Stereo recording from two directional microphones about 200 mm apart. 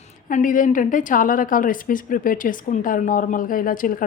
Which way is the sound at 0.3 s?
40° left (ahead or behind).